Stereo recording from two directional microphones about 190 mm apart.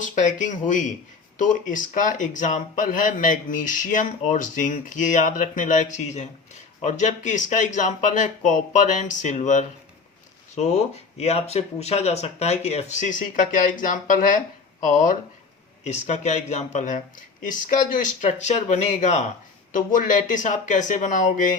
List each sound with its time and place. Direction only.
0.0 s speech: 40° left (ahead or behind)